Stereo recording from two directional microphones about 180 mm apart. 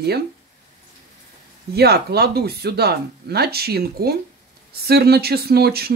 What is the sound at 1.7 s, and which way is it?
Speech, 65° right (ahead or behind).